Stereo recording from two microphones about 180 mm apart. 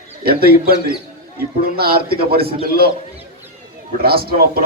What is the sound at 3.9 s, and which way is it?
Speech, 60° right (ahead or behind).